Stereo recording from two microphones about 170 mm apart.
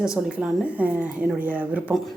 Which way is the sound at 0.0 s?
5° right (ahead or behind).